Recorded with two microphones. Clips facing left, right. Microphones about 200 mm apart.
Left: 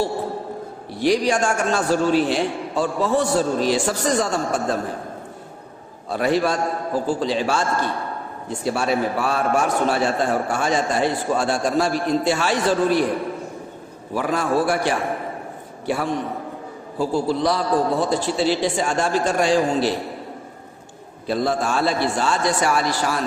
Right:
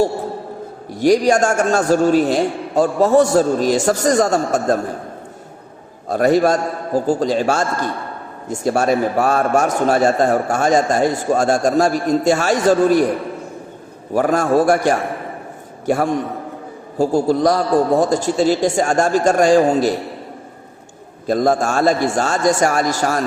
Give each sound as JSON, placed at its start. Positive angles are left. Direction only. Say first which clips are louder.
{"t": 0.9, "sound": "a man's voice", "louder": "right 6 dB", "side_deg": -45}
{"t": 6.1, "sound": "a man's voice", "louder": "right 6 dB", "side_deg": -45}
{"t": 14.1, "sound": "a man's voice", "louder": "right 6 dB", "side_deg": -45}
{"t": 21.2, "sound": "a man's voice", "louder": "right 5 dB", "side_deg": -45}